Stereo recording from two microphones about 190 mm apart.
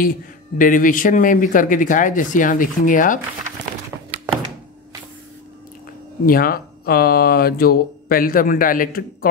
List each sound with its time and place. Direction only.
0.0 s speech: 45° left (ahead or behind)
6.2 s speech: 50° left (ahead or behind)